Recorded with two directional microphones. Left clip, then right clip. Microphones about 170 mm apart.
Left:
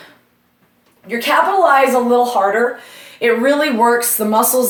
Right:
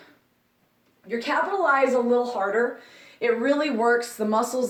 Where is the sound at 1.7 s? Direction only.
10° left (ahead or behind).